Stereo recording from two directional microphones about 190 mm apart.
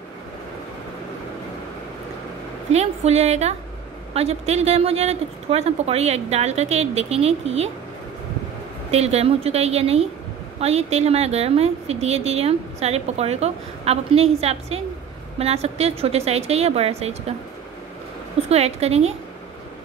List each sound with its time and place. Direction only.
2.7 s a woman's voice: 35° right (ahead or behind)
8.9 s a woman's voice: 35° right (ahead or behind)
18.5 s a woman's voice: 35° right (ahead or behind)